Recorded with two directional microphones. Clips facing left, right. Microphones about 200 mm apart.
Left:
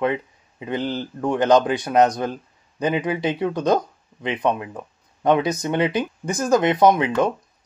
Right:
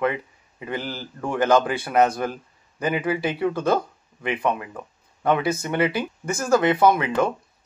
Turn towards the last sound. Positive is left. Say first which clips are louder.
# left 2 dB
turn(degrees=20)  # may be behind; listen again after turning